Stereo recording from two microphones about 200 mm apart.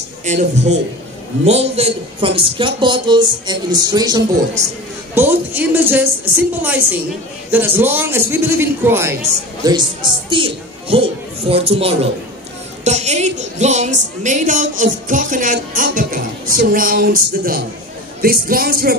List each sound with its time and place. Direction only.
0.2 s a woman's voice: 35° right (ahead or behind); by 9.1 s 10° right (ahead or behind)
9.7 s a man's voice: 20° right (ahead or behind); by 18.9 s 50° right (ahead or behind)